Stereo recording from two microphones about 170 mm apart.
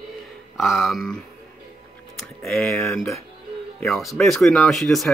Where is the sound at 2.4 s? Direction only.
Centre (ahead or behind).